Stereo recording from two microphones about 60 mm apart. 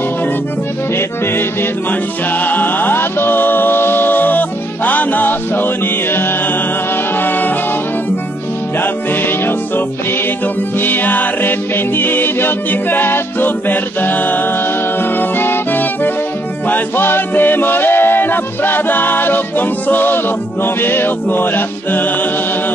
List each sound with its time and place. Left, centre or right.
0.9 s music: left
7.2 s brass instrument: left
8.8 s music: left